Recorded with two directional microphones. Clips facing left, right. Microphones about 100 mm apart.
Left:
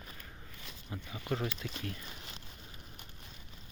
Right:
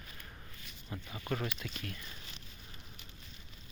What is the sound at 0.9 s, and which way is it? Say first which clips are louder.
Speech: left 1 dB; 20° left (ahead or behind).